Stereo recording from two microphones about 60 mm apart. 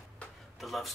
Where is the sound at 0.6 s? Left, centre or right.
Centre.